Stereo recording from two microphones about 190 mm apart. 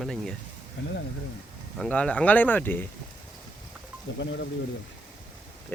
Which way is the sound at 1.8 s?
5° left (ahead or behind).